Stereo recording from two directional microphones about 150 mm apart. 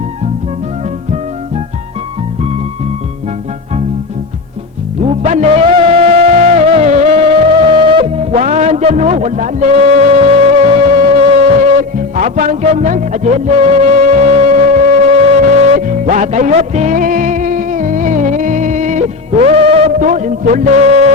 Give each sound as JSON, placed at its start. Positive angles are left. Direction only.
{"t": 5.2, "sound": "music", "side_deg": -50}
{"t": 11.8, "sound": "music", "side_deg": -60}
{"t": 20.0, "sound": "music", "side_deg": -55}